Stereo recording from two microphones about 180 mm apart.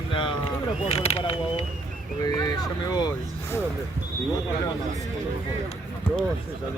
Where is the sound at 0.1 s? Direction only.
25° left (ahead or behind).